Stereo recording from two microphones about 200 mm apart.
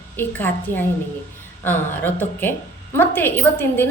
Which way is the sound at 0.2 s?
10° left (ahead or behind).